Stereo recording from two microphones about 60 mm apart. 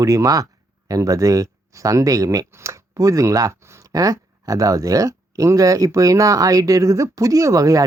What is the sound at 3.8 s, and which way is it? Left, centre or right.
Speech, right.